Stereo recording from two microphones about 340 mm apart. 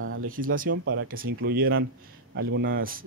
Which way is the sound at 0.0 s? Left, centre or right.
Right.